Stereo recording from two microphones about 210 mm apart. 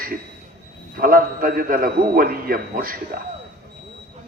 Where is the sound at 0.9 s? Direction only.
45° right (ahead or behind).